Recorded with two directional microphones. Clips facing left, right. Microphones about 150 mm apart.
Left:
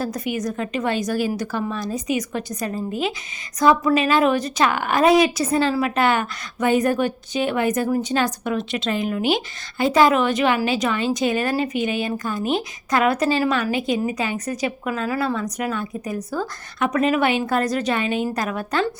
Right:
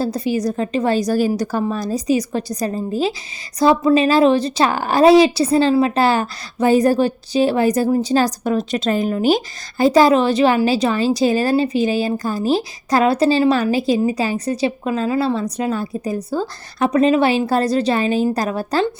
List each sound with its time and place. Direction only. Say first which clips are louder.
0.0 s a woman's voice: right 5 dB; 30° right (ahead or behind)